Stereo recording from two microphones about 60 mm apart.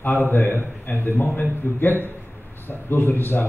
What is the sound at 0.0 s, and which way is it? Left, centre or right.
A man's voice, left.